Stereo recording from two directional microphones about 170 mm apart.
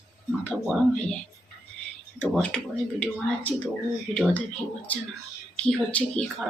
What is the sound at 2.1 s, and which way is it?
Speech, 5° left (ahead or behind).